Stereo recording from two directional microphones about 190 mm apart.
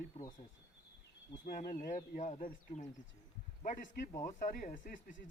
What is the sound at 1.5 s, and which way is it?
Speech, 55° left (ahead or behind).